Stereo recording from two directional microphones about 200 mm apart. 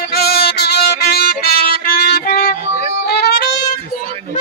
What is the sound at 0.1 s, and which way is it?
Music, 50° left (ahead or behind).